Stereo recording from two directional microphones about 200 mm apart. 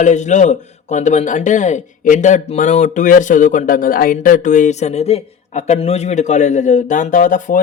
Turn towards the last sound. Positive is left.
turn(degrees=40)  # may be behind; listen again after turning